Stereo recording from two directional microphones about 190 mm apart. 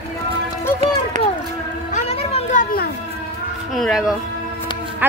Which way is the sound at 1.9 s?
35° left (ahead or behind).